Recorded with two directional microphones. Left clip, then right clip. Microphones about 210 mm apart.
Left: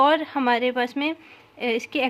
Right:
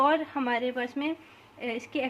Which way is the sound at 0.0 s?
30° left (ahead or behind).